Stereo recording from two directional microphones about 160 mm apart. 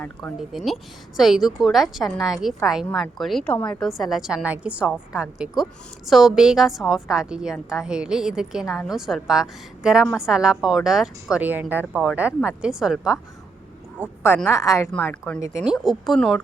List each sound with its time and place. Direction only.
0.0 s speech: 10° left (ahead or behind)
0.3 s a woman's voice: centre (ahead or behind)
14.4 s speech: 20° left (ahead or behind)
15.6 s a woman's voice: centre (ahead or behind)